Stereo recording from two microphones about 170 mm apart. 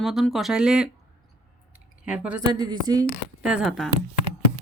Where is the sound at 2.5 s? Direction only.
25° right (ahead or behind).